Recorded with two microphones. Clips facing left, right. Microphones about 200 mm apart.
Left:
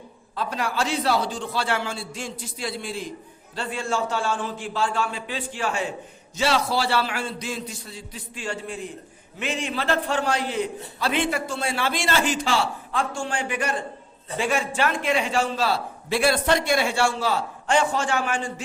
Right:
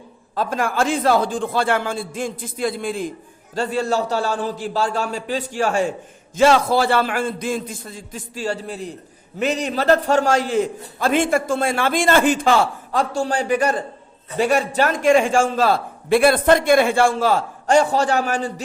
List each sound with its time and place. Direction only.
0.3 s a man's voice: 50° right (ahead or behind)
3.5 s a man's voice: 40° right (ahead or behind)